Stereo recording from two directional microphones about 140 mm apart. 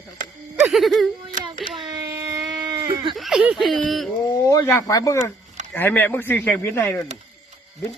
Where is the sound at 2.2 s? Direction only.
25° right (ahead or behind).